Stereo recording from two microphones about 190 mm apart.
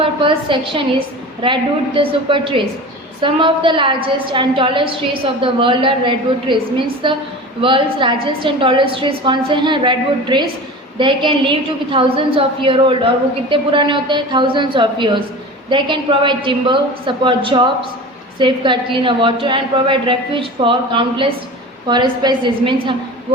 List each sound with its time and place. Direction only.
0.0 s a woman's voice: 25° right (ahead or behind)